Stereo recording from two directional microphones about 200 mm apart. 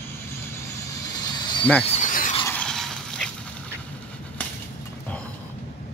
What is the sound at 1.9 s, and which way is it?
Mechanisms, 40° left (ahead or behind).